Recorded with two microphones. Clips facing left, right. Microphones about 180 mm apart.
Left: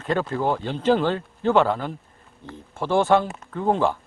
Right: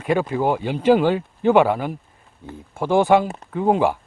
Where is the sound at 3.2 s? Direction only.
35° right (ahead or behind).